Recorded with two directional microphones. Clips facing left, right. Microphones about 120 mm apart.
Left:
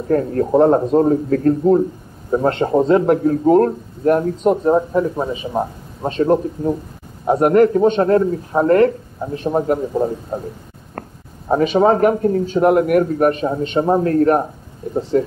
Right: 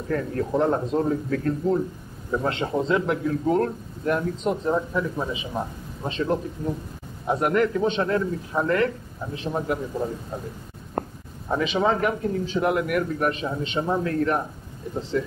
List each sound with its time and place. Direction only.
0.1 s a man's voice: 40° left (ahead or behind)
11.0 s a sound: 15° right (ahead or behind)
11.4 s a man's voice: 45° left (ahead or behind)